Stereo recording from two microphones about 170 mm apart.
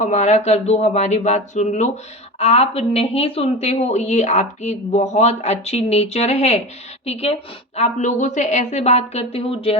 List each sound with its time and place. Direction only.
0.0 s speech: 45° left (ahead or behind)